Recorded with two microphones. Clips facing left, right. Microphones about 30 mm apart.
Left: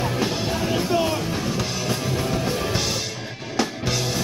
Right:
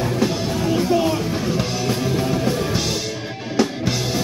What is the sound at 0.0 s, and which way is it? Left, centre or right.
Music, centre.